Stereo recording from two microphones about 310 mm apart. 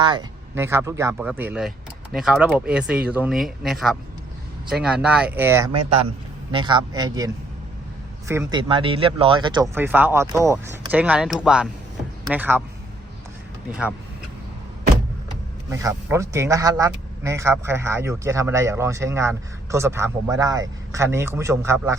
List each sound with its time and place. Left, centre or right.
0.0 s speech: centre
8.3 s speech: centre
13.7 s speech: centre
15.7 s speech: centre